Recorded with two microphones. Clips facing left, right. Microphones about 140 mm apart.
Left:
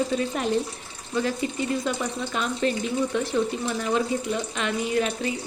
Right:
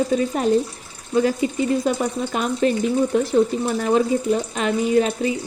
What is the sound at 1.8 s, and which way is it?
Speech, 45° right (ahead or behind).